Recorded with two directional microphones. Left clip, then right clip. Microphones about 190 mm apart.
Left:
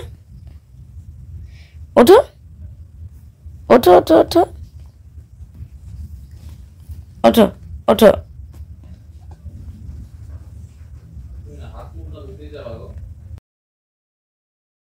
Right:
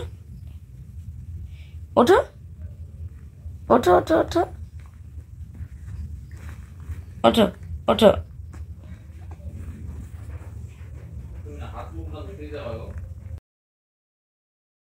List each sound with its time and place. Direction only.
1.6 s a sound: 40° left (ahead or behind)
3.6 s speech: 45° left (ahead or behind)
7.2 s speech: 30° left (ahead or behind)